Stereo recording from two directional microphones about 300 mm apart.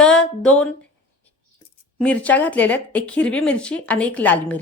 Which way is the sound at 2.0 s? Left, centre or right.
Centre.